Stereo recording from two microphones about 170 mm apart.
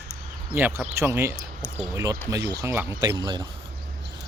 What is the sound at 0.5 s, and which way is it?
Speech, 10° right (ahead or behind).